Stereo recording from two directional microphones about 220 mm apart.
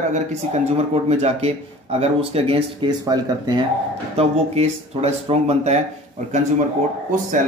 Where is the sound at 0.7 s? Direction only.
30° right (ahead or behind).